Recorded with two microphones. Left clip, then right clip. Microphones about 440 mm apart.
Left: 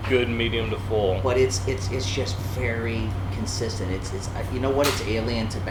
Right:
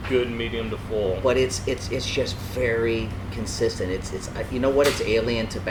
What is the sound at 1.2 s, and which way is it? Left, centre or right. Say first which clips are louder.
Speech: right 1 dB; right.